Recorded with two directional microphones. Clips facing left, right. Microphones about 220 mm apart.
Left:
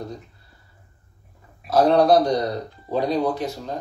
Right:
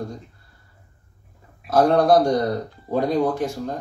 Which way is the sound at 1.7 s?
50° right (ahead or behind).